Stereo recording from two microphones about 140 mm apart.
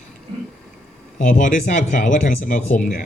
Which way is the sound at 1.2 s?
60° left (ahead or behind).